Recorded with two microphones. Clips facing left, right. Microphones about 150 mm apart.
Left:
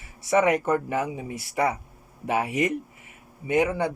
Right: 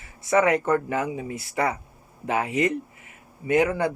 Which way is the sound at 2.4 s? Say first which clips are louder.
Right 1 dB; 10° left (ahead or behind).